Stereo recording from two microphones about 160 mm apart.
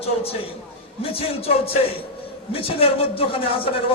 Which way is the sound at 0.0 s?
35° left (ahead or behind).